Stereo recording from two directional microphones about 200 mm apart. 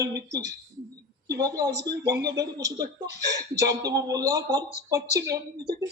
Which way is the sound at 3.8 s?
20° right (ahead or behind).